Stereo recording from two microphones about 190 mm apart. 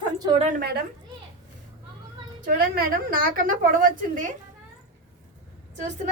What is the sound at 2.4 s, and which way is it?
A woman's voice, 50° right (ahead or behind).